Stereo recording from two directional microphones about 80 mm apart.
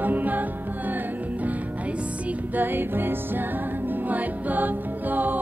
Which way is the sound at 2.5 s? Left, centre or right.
Right.